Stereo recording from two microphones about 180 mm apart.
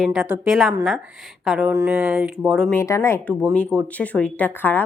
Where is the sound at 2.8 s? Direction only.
15° left (ahead or behind).